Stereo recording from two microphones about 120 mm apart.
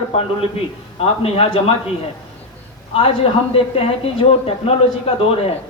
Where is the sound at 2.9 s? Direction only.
50° left (ahead or behind).